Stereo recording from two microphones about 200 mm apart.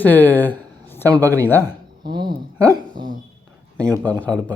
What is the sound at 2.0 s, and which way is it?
Speech, 20° right (ahead or behind).